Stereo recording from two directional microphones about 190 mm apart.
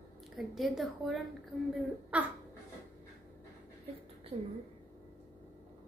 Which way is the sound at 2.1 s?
5° right (ahead or behind).